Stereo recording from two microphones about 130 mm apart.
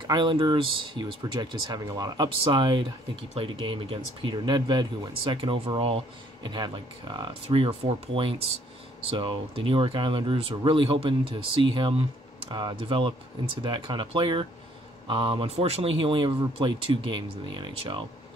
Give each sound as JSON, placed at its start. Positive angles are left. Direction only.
{"t": 0.0, "sound": "speech", "side_deg": -35}
{"t": 7.4, "sound": "speech", "side_deg": -45}
{"t": 12.4, "sound": "speech", "side_deg": -35}